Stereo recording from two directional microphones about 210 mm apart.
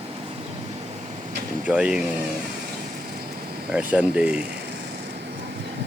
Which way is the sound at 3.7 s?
5° right (ahead or behind).